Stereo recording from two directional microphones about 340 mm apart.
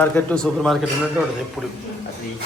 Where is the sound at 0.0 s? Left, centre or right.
Centre.